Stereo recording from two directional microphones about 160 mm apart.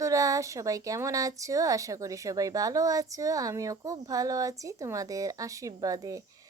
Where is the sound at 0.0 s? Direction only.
20° right (ahead or behind).